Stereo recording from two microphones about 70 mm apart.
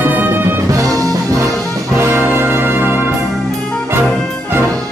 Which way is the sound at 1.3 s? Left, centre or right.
Right.